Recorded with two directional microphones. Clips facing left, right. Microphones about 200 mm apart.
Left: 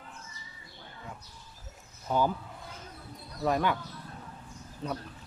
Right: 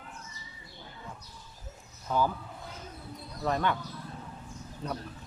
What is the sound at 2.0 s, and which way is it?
Speech, 15° left (ahead or behind).